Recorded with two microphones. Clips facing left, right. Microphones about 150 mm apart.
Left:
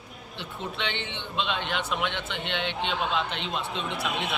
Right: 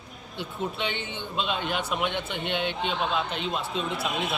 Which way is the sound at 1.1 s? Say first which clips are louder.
Left 1 dB; 40° right (ahead or behind).